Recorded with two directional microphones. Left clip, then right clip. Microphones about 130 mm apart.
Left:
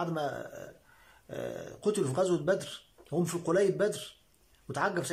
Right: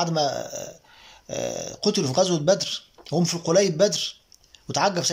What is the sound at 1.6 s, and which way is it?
A man's voice, 5° right (ahead or behind).